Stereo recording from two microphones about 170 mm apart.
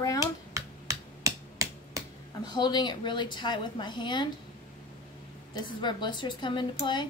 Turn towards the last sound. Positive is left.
turn(degrees=25)  # may be behind; listen again after turning